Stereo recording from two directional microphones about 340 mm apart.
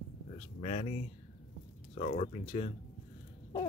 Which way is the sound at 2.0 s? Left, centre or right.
Left.